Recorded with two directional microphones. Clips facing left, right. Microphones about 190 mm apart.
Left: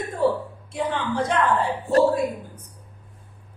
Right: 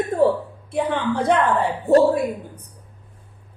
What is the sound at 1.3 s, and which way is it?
Speech, 60° right (ahead or behind).